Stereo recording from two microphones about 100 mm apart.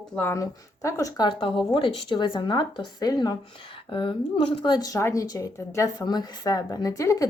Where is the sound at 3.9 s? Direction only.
60° left (ahead or behind); by 7.2 s 35° left (ahead or behind).